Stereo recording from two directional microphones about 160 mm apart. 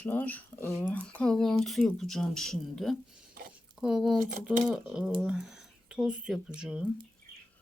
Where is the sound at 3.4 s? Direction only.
60° right (ahead or behind).